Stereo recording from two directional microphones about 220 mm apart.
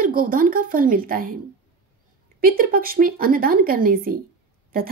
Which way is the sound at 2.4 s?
40° right (ahead or behind).